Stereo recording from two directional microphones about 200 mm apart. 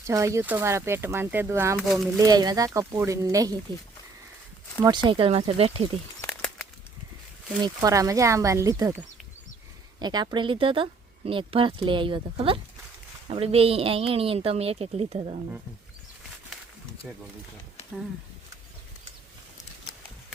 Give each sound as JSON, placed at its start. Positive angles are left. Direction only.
{"t": 0.0, "sound": "speech", "side_deg": -15}
{"t": 1.8, "sound": "speech", "side_deg": 0}
{"t": 2.1, "sound": "speech", "side_deg": -20}
{"t": 5.0, "sound": "speech", "side_deg": -25}
{"t": 6.2, "sound": "a sound", "side_deg": 5}
{"t": 7.6, "sound": "speech", "side_deg": -20}